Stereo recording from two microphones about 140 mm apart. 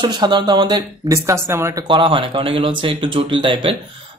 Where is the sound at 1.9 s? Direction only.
40° right (ahead or behind).